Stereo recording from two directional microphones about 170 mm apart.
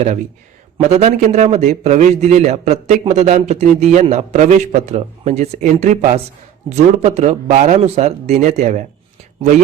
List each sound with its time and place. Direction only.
0.8 s a man's voice: 40° right (ahead or behind)